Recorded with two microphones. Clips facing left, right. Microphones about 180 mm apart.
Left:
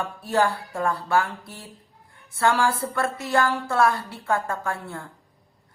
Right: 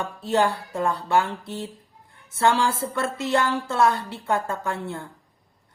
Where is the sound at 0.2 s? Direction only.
20° right (ahead or behind).